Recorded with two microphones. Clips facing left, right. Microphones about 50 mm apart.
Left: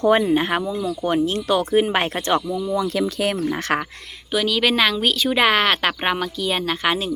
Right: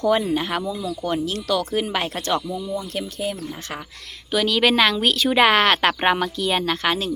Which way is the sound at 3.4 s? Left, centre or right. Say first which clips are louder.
Left 10 dB; left.